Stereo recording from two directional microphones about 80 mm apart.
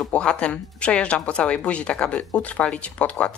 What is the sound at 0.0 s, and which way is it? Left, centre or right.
Speech, centre.